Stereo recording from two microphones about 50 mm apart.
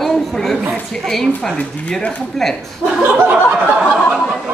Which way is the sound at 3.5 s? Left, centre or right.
Centre.